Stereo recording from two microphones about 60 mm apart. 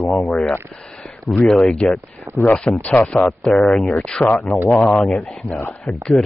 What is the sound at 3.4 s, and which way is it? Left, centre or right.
Speech, centre.